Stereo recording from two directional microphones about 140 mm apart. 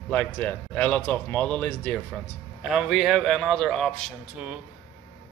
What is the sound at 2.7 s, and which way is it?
A man's voice, 5° right (ahead or behind).